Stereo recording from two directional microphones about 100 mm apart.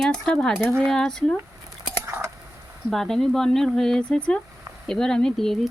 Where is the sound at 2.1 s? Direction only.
30° right (ahead or behind).